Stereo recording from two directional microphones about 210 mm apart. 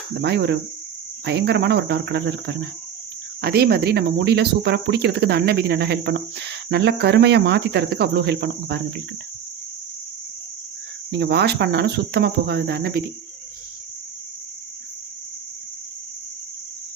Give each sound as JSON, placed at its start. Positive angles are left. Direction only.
{"t": 0.2, "sound": "speech", "side_deg": -55}
{"t": 11.1, "sound": "speech", "side_deg": -50}